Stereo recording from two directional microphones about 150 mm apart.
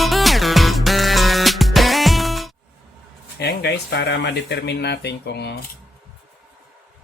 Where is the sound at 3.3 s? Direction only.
90° left.